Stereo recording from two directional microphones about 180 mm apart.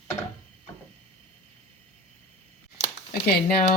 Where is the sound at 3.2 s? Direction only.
55° left (ahead or behind).